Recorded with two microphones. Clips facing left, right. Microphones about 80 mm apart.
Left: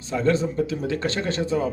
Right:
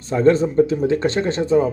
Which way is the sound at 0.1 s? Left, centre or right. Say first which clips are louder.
Right 7 dB; right.